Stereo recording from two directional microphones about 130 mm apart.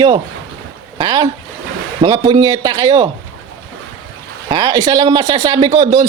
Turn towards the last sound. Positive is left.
turn(degrees=-35)  # may be behind; listen again after turning